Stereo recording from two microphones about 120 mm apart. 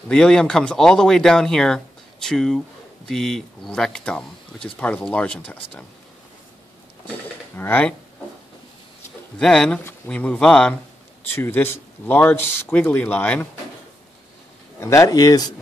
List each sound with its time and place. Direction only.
0.1 s speech: 5° left (ahead or behind)
7.5 s speech: 15° left (ahead or behind)
9.4 s speech: 5° left (ahead or behind)
11.3 s speech: 20° left (ahead or behind)
14.8 s speech: 25° left (ahead or behind)